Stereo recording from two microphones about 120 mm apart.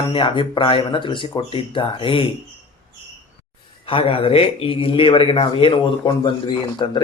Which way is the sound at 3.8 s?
50° left (ahead or behind).